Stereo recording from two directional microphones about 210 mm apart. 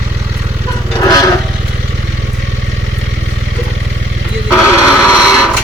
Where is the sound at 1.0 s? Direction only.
15° left (ahead or behind).